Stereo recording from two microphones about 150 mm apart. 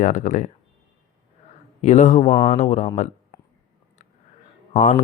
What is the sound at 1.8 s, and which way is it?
Speech, 50° left (ahead or behind).